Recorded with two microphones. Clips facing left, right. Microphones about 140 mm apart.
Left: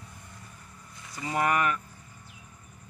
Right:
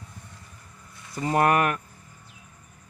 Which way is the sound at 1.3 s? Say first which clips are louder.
Right 5 dB; 60° right (ahead or behind).